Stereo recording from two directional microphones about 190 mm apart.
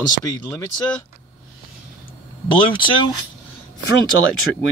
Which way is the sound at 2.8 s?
25° left (ahead or behind).